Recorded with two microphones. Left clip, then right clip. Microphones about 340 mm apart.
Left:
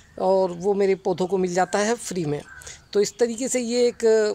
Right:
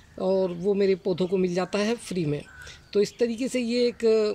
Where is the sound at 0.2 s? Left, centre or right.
Left.